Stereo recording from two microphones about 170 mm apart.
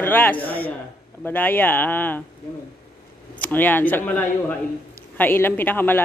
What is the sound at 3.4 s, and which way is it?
A man's voice, 10° left (ahead or behind).